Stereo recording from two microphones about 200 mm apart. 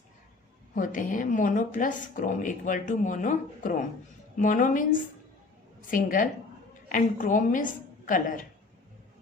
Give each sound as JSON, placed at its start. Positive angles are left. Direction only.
{"t": 0.8, "sound": "a woman's voice", "side_deg": 40}